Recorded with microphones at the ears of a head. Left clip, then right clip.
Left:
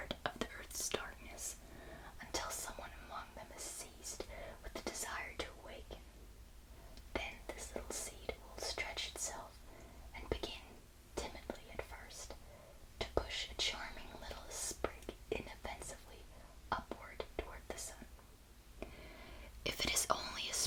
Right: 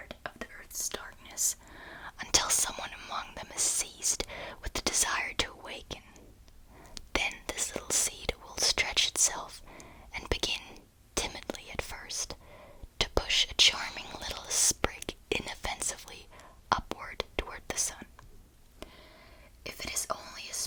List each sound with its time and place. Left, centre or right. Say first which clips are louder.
0.0 s whispering: even; centre
0.7 s whispering: right 6 dB; right
19.6 s whispering: right 1 dB; centre